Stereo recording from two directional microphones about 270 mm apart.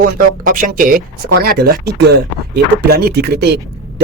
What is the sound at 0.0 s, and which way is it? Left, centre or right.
Speech, right.